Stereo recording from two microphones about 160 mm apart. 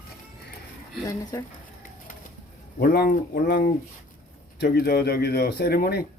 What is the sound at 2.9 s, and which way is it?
Speech, 70° left (ahead or behind).